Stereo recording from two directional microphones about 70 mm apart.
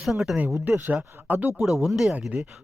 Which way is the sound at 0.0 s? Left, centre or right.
Centre.